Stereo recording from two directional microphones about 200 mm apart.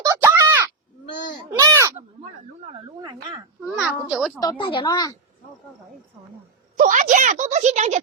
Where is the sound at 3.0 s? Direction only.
20° right (ahead or behind).